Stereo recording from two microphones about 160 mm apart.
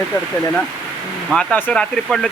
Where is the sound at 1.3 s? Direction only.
5° left (ahead or behind).